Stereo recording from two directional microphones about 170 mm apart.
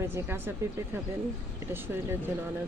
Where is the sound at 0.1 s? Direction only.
15° right (ahead or behind).